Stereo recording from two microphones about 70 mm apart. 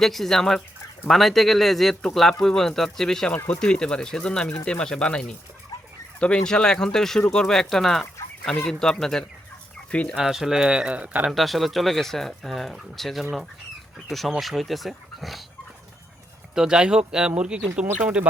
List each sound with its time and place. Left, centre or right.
0.0 s speech: centre
3.3 s speech: left
3.6 s speech: centre
9.9 s speech: centre
10.2 s speech: centre; by 11.3 s right
11.3 s speech: centre
16.6 s speech: centre